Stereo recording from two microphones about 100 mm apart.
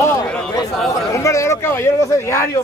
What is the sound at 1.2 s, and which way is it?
A man's voice, 30° left (ahead or behind).